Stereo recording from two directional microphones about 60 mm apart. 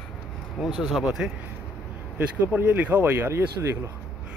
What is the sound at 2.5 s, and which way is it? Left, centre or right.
Speech, right.